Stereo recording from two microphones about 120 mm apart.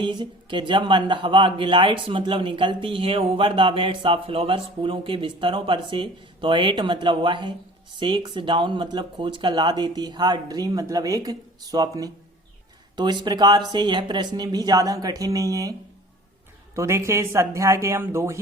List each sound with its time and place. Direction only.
0.0 s speech: 40° right (ahead or behind)
16.7 s speech: 25° right (ahead or behind)